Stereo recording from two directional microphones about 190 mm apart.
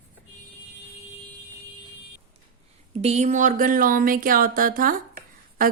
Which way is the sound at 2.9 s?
35° right (ahead or behind).